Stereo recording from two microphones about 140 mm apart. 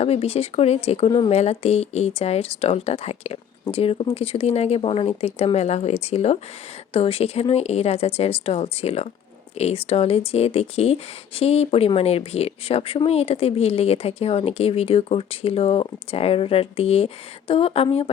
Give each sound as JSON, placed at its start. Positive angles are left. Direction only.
{"t": 0.0, "sound": "speech", "side_deg": 45}